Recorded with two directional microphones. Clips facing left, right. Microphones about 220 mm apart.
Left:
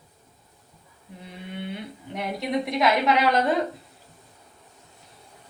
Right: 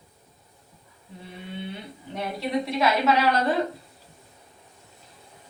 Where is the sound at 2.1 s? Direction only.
15° left (ahead or behind).